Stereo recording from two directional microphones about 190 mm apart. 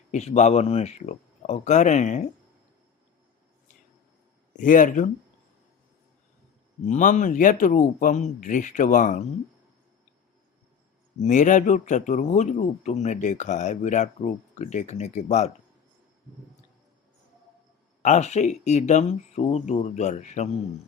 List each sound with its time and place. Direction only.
0.1 s a man's voice: 35° left (ahead or behind)
4.5 s speech: 45° left (ahead or behind)
6.8 s a man's voice: 40° left (ahead or behind)
11.2 s a man's voice: 40° left (ahead or behind)
18.0 s a man's voice: 40° left (ahead or behind)